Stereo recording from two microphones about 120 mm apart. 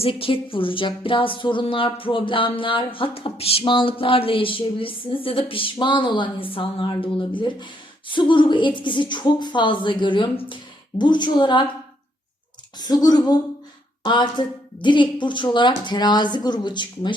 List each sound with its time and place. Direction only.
0.0 s speech: 50° left (ahead or behind)
12.8 s a woman's voice: 30° left (ahead or behind)